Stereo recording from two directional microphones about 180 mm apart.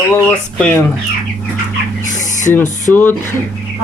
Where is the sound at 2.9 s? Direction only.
5° left (ahead or behind).